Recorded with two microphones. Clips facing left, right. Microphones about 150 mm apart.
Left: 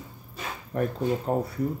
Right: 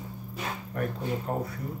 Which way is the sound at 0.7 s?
30° left (ahead or behind).